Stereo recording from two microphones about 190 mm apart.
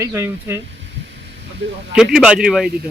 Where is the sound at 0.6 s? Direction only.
70° right (ahead or behind).